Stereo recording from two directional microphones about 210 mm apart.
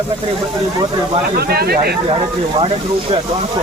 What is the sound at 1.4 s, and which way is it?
Speech, 50° right (ahead or behind).